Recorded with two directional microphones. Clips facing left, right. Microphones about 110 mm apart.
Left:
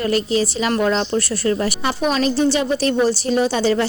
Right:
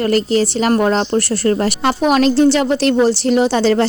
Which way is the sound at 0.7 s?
40° right (ahead or behind).